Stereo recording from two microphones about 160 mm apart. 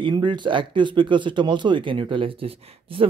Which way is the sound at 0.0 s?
30° right (ahead or behind).